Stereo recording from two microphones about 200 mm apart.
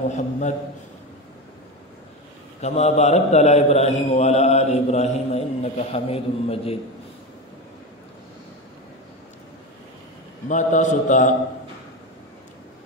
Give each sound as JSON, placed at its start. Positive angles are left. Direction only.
{"t": 0.1, "sound": "a man's voice", "side_deg": 35}
{"t": 2.6, "sound": "a man's voice", "side_deg": 35}
{"t": 10.5, "sound": "a man's voice", "side_deg": 40}